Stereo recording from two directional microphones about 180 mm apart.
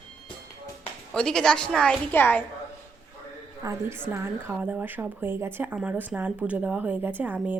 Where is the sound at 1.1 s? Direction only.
5° left (ahead or behind).